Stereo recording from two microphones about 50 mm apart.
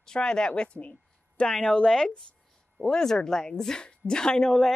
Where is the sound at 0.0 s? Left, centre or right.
Centre.